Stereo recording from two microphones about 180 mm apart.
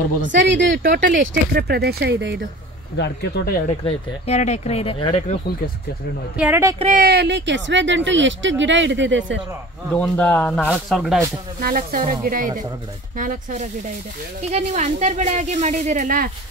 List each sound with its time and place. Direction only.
0.2 s speech: 90° right; by 2.4 s 65° right (ahead or behind)
3.0 s speech: 65° left (ahead or behind)
3.8 s speech: 40° left (ahead or behind)
6.3 s speech: 10° right (ahead or behind)
7.0 s speech: 65° right (ahead or behind); by 9.4 s 90° right
9.9 s speech: 5° left (ahead or behind)
11.6 s speech: 50° right (ahead or behind)